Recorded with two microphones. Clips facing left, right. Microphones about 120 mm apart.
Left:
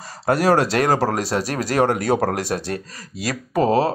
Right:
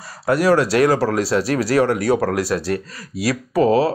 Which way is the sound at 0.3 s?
45° left (ahead or behind).